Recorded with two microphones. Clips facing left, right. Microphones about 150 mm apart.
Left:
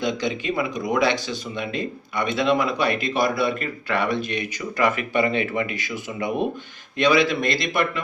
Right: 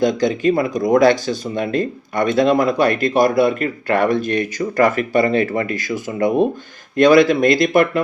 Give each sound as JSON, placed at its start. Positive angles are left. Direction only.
{"t": 0.0, "sound": "speech", "side_deg": -45}